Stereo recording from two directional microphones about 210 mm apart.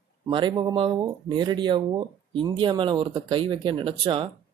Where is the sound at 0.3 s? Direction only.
20° right (ahead or behind).